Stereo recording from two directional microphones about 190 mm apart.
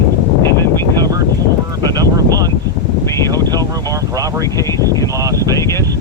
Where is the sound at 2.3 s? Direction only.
20° right (ahead or behind).